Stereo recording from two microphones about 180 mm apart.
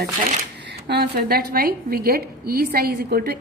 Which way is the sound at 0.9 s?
60° right (ahead or behind).